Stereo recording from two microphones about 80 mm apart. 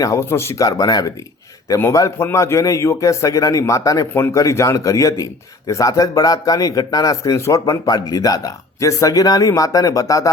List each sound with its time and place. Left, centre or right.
0.0 s speech: left
0.6 s a man's voice: left
4.1 s a man's voice: left